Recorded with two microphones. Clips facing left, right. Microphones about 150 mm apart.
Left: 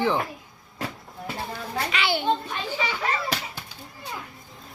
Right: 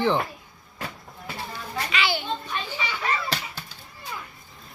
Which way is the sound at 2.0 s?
55° left (ahead or behind).